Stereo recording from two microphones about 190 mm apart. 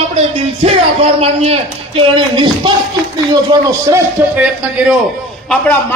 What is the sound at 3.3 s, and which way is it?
A man's voice, 20° right (ahead or behind).